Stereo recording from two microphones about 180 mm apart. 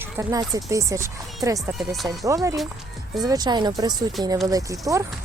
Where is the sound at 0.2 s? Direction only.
20° right (ahead or behind).